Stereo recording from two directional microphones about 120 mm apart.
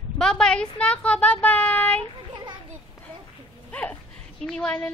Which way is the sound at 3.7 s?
10° left (ahead or behind).